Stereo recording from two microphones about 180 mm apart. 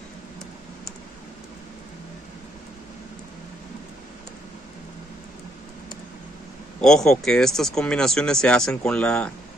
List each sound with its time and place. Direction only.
6.8 s speech: centre (ahead or behind)